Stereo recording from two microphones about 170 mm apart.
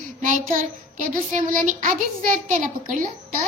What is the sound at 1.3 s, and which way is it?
A child's voice, 45° right (ahead or behind).